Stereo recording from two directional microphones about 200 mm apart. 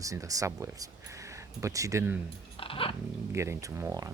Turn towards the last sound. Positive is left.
turn(degrees=-15)  # may be behind; listen again after turning